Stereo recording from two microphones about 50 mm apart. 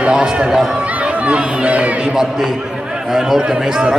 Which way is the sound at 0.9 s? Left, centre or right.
Right.